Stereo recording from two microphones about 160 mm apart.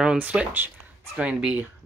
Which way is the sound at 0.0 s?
5° right (ahead or behind).